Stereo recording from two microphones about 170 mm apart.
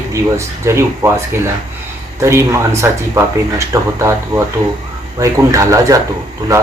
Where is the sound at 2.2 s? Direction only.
15° right (ahead or behind).